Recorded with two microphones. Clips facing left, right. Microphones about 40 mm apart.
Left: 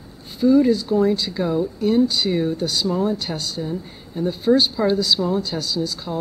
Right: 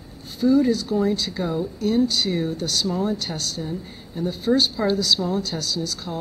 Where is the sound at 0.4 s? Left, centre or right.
Centre.